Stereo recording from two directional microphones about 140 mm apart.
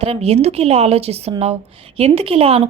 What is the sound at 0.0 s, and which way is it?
A woman's voice, 45° right (ahead or behind).